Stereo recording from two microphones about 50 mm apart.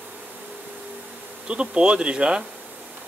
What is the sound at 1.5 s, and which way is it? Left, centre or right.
Speech, right.